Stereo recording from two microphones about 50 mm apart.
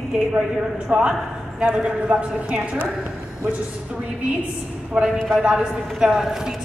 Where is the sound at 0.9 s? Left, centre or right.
Right.